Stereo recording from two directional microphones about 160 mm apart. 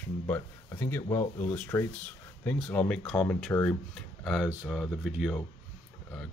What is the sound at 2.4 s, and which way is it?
Speech, 5° left (ahead or behind).